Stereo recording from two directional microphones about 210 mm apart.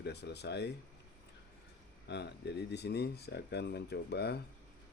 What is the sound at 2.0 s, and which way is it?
Speech, 55° left (ahead or behind).